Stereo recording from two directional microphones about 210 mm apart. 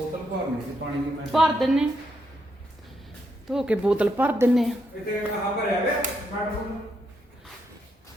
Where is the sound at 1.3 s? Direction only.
Centre (ahead or behind).